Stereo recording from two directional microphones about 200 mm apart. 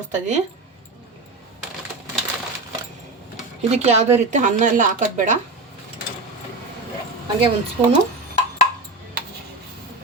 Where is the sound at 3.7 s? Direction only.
35° right (ahead or behind).